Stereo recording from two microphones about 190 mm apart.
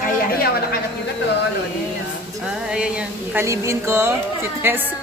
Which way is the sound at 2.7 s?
5° right (ahead or behind).